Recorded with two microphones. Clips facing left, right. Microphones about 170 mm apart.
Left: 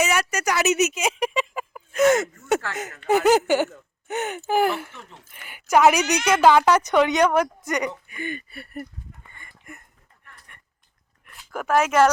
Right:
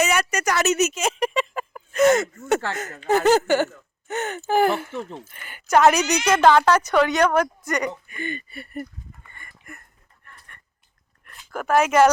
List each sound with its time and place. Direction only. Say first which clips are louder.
0.0 s a sound: right 1 dB; 5° left (ahead or behind)
3.2 s a woman's voice: right 1 dB; 10° left (ahead or behind)
4.9 s speech: right 13 dB; 35° right (ahead or behind)
5.3 s a woman's voice: even; 5° left (ahead or behind)
9.3 s a sound: right 1 dB; 20° left (ahead or behind)
11.3 s speech: right 1 dB; 5° left (ahead or behind)